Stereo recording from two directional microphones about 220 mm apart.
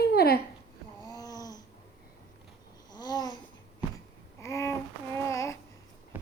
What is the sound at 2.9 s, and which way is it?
Babbling, 20° left (ahead or behind).